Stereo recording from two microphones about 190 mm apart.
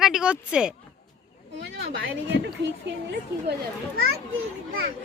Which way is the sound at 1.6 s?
65° right (ahead or behind).